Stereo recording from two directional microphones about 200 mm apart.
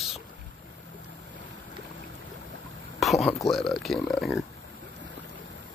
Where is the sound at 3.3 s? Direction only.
Centre (ahead or behind).